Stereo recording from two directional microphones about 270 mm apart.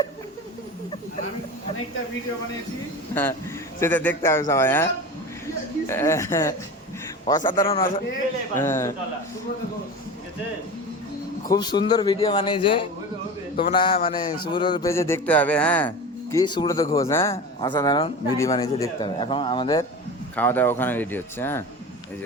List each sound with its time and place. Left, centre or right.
3.8 s a man's voice: centre
7.5 s a man's voice: left
8.5 s a man's voice: centre
11.5 s a man's voice: centre
16.3 s a man's voice: centre